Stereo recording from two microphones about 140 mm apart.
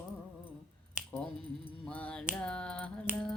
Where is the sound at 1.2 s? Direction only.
5° left (ahead or behind).